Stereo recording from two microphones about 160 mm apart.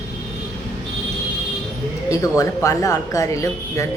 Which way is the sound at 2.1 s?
20° left (ahead or behind).